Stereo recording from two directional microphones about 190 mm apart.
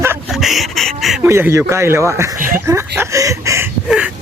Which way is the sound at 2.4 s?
45° right (ahead or behind).